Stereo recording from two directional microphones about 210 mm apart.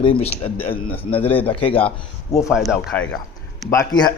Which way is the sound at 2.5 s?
Centre (ahead or behind).